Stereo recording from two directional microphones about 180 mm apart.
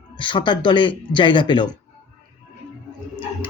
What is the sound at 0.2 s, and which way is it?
Speech, 25° left (ahead or behind).